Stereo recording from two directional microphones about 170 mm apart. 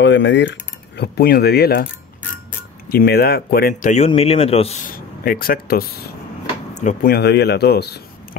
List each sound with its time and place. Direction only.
0.0 s speech: 90° left; by 1.9 s 65° left (ahead or behind)
2.9 s speech: 65° left (ahead or behind)
3.9 s speech: 40° left (ahead or behind)
4.8 s speech: 55° left (ahead or behind)
6.7 s speech: 45° left (ahead or behind)
7.1 s speech: 70° left (ahead or behind)